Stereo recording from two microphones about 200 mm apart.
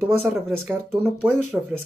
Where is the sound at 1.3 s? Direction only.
5° left (ahead or behind).